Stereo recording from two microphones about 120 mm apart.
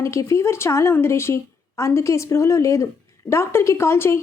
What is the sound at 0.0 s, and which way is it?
A woman's voice, 25° left (ahead or behind).